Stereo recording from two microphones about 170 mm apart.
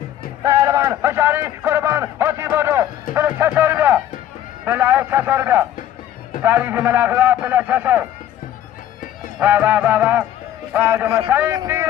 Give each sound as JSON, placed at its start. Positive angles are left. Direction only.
{"t": 0.4, "sound": "a man's voice", "side_deg": -20}
{"t": 9.4, "sound": "a man's voice", "side_deg": -10}